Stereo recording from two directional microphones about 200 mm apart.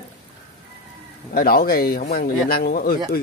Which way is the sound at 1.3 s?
50° left (ahead or behind).